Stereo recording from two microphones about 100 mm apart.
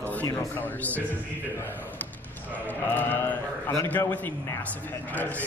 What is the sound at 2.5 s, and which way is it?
Speech, 15° left (ahead or behind).